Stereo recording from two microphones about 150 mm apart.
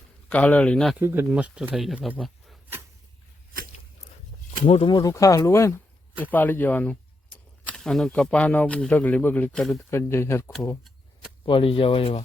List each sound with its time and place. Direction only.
0.3 s speech: 10° left (ahead or behind)
0.9 s speech: 15° right (ahead or behind); by 2.6 s centre (ahead or behind)
4.6 s speech: 40° left (ahead or behind)
4.9 s speech: 20° left (ahead or behind); by 9.8 s 5° left (ahead or behind)
9.9 s speech: 15° left (ahead or behind)
11.4 s speech: 35° left (ahead or behind)